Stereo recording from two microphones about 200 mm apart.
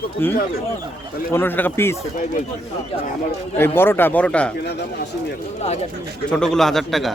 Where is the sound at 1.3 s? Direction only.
10° left (ahead or behind).